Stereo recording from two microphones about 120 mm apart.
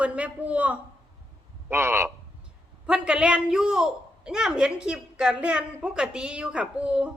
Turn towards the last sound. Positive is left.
turn(degrees=-10)  # may be behind; listen again after turning